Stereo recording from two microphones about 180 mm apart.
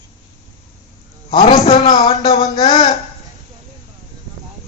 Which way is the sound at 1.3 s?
30° left (ahead or behind).